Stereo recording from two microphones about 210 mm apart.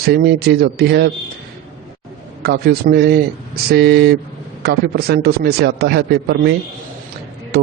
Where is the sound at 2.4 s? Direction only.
50° right (ahead or behind).